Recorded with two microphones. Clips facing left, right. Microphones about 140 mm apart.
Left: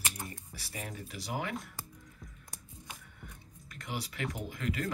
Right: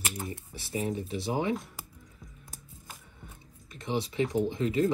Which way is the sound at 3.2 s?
25° right (ahead or behind).